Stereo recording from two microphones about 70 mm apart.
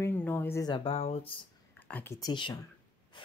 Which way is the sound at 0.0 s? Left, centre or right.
Left.